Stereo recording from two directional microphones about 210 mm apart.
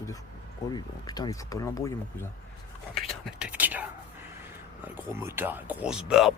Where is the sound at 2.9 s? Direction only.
Centre (ahead or behind).